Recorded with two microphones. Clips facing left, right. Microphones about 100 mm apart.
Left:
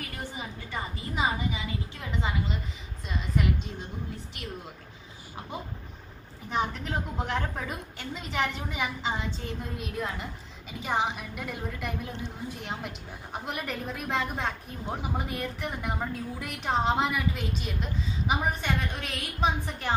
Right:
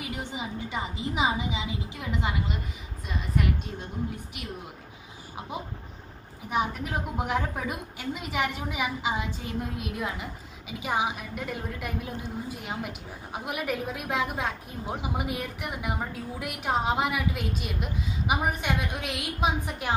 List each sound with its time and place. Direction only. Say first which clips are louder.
0.0 s a woman's voice: right 3 dB; 15° right (ahead or behind)
6.5 s a woman's voice: right 1 dB; 10° right (ahead or behind)